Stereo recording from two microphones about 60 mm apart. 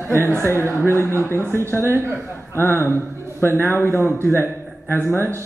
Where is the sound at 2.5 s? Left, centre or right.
Left.